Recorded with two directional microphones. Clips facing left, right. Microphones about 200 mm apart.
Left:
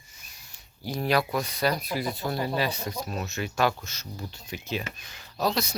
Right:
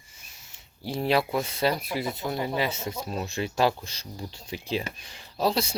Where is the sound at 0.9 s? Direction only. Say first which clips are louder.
Right 1 dB; 25° right (ahead or behind).